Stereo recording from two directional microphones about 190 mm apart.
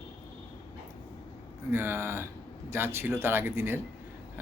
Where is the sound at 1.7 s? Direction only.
15° right (ahead or behind).